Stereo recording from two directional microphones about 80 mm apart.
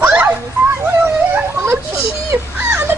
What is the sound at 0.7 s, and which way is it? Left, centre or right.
Speech, right.